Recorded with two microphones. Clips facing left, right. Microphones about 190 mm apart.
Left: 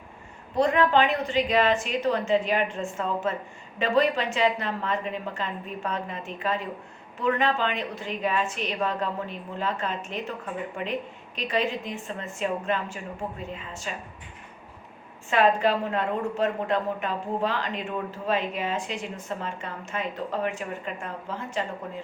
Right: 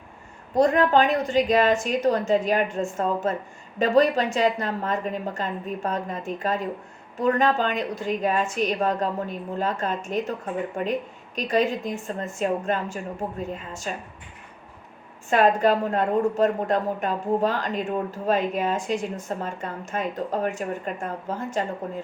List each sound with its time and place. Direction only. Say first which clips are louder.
0.5 s a woman's voice: right 3 dB; 45° right (ahead or behind)
15.3 s a woman's voice: right 3 dB; 45° right (ahead or behind)